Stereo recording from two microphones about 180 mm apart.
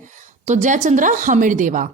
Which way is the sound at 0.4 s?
40° right (ahead or behind).